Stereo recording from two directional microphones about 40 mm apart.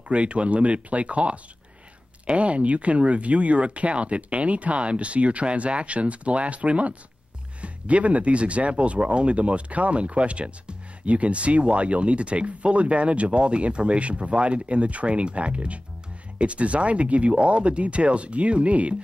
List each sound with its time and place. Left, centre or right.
0.1 s speech: right